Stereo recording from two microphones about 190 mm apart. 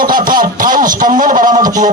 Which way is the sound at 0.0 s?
50° right (ahead or behind).